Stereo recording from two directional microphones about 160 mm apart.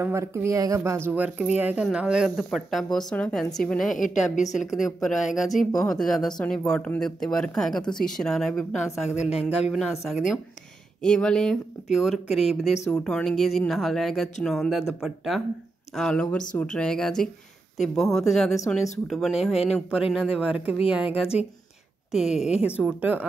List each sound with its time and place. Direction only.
0.0 s speech: 15° right (ahead or behind); by 3.9 s 5° left (ahead or behind)
3.9 s a woman's voice: 50° left (ahead or behind)
4.6 s speech: centre (ahead or behind)
22.4 s speech: 5° right (ahead or behind)